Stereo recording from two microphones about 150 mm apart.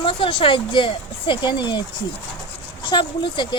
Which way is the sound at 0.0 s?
35° left (ahead or behind).